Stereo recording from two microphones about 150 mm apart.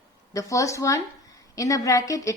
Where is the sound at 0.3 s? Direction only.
20° left (ahead or behind).